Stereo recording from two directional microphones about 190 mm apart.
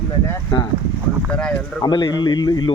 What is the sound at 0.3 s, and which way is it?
Speech, 20° left (ahead or behind).